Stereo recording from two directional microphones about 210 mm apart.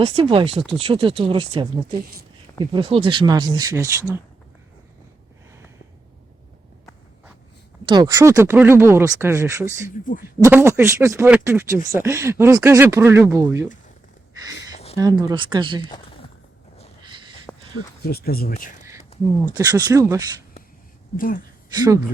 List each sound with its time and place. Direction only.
0.0 s speech: 30° right (ahead or behind)
7.9 s speech: 20° right (ahead or behind)
14.9 s speech: 15° right (ahead or behind)
17.5 s a sound: 5° left (ahead or behind)
18.1 s speech: 45° left (ahead or behind)
19.1 s a sound: 30° left (ahead or behind)
19.5 s speech: 15° right (ahead or behind)